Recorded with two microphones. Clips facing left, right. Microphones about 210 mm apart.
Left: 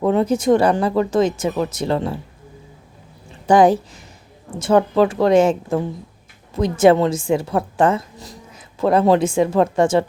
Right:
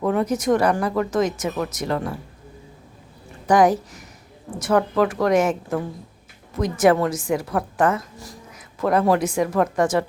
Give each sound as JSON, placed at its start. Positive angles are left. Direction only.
{"t": 0.0, "sound": "speech", "side_deg": 25}
{"t": 3.4, "sound": "speech", "side_deg": 30}